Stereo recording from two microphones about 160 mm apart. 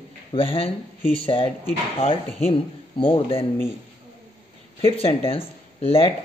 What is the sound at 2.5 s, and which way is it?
Speech, 35° left (ahead or behind).